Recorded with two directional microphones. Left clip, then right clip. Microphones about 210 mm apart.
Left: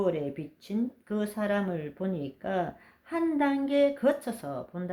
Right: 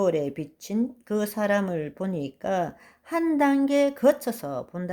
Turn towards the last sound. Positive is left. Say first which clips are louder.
# right 4 dB
turn(degrees=-40)  # may be behind; listen again after turning